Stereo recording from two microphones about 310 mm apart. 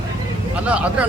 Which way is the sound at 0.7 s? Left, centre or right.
Centre.